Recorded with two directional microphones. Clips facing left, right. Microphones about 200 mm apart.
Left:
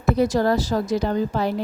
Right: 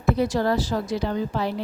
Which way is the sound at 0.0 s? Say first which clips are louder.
Left 3 dB; 40° left (ahead or behind).